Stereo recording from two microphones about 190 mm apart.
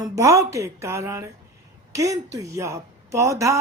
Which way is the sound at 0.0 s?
15° right (ahead or behind).